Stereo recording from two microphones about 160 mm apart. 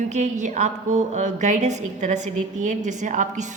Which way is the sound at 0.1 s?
50° right (ahead or behind).